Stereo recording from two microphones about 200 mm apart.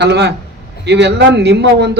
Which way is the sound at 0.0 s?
55° right (ahead or behind).